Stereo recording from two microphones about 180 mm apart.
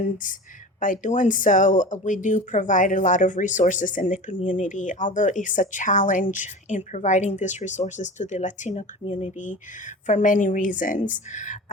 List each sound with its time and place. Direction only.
0.0 s speech: 45° left (ahead or behind)